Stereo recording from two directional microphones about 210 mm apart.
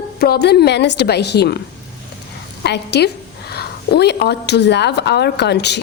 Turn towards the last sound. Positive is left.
turn(degrees=55)  # may be behind; listen again after turning